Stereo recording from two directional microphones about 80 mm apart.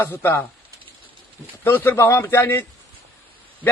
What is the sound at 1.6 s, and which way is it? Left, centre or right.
A man's voice, left.